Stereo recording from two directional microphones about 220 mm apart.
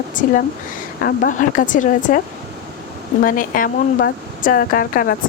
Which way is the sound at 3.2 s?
40° left (ahead or behind).